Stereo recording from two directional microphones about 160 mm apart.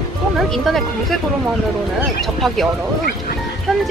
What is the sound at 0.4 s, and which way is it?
Speech, centre (ahead or behind).